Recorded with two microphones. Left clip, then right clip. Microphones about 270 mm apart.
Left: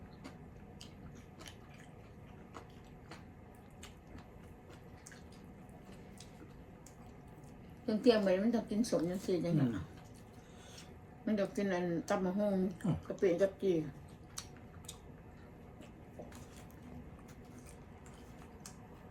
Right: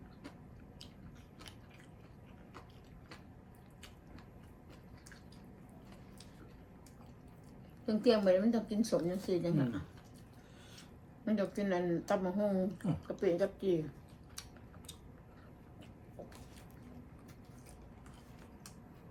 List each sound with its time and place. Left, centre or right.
7.9 s a woman's voice: centre
11.3 s a woman's voice: centre